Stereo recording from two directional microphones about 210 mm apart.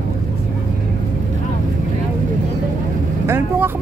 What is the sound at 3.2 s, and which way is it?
Vehicle, 10° right (ahead or behind).